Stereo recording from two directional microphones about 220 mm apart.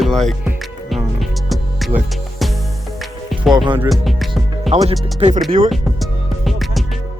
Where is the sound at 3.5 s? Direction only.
20° right (ahead or behind).